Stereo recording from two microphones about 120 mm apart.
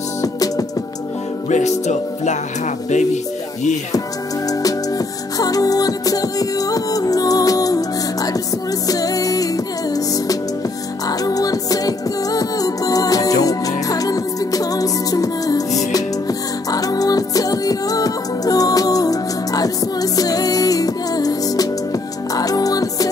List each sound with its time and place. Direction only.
0.2 s music: 30° left (ahead or behind)
1.5 s music: 80° left
4.5 s music: 30° left (ahead or behind)